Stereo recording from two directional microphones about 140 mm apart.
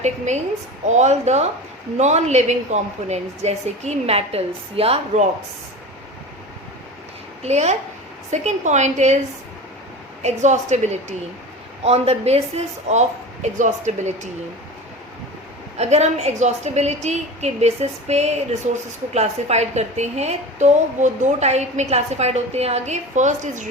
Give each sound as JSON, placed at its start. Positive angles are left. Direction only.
{"t": 0.9, "sound": "a woman's voice", "side_deg": -55}
{"t": 7.4, "sound": "a woman's voice", "side_deg": -50}
{"t": 10.2, "sound": "a woman's voice", "side_deg": -55}
{"t": 15.8, "sound": "a woman's voice", "side_deg": -50}